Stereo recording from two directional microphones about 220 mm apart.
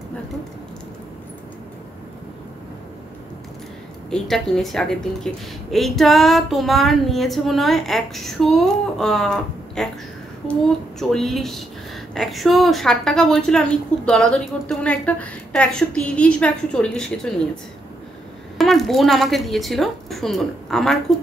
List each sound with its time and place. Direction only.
4.1 s a woman's voice: centre (ahead or behind)
18.6 s a woman's voice: centre (ahead or behind)